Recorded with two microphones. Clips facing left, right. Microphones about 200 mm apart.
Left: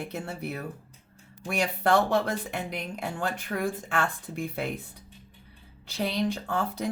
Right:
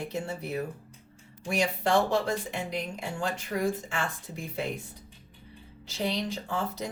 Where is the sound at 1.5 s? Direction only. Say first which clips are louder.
Left 1 dB; 60° left (ahead or behind).